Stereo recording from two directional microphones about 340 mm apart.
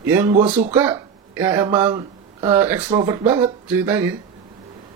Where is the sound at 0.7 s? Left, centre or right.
Centre.